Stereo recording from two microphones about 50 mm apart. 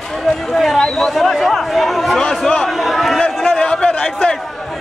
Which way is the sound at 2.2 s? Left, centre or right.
Left.